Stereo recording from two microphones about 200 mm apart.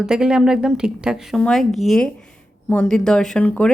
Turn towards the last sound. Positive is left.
turn(degrees=5)  # may be behind; listen again after turning